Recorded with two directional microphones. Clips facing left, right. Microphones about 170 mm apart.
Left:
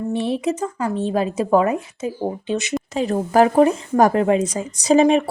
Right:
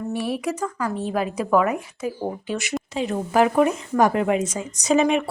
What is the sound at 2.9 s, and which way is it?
Speech, 40° left (ahead or behind).